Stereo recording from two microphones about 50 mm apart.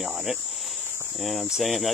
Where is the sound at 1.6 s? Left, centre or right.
Centre.